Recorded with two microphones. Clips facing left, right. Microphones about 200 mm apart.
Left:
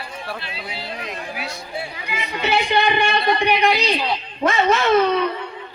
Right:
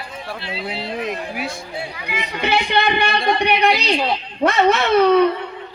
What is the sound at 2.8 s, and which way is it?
Speech, 45° right (ahead or behind).